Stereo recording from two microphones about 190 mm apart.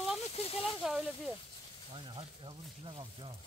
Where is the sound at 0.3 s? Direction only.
30° left (ahead or behind).